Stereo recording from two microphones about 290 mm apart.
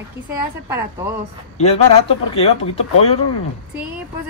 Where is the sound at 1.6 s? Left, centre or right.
Left.